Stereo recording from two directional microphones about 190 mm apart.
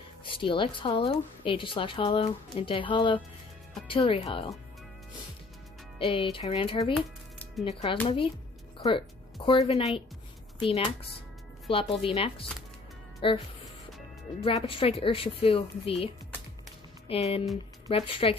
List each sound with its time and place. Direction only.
0.2 s a woman's voice: 25° left (ahead or behind)
5.9 s a woman's voice: 30° left (ahead or behind)
8.7 s music: 25° left (ahead or behind)
9.5 s a woman's voice: 25° left (ahead or behind)
14.4 s a woman's voice: 30° left (ahead or behind)
17.1 s speech: 30° left (ahead or behind)